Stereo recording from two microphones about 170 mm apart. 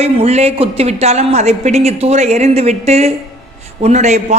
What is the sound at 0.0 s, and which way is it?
A woman's voice, 40° right (ahead or behind).